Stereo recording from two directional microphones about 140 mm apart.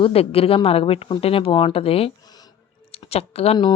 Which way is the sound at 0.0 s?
45° left (ahead or behind).